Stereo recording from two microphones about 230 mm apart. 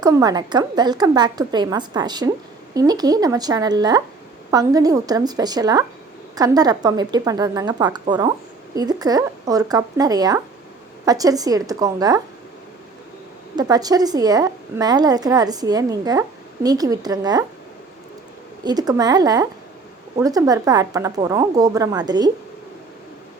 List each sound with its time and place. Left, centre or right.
0.0 s a woman's voice: centre
13.6 s a woman's voice: centre
18.6 s a woman's voice: centre